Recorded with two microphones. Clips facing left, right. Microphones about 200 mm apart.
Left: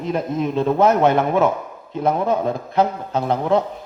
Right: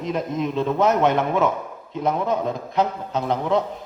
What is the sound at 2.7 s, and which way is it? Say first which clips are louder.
Speech: left 3 dB; 50° left (ahead or behind).